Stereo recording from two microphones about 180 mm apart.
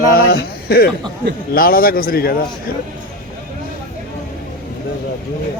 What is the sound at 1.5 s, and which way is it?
Speech, 55° left (ahead or behind).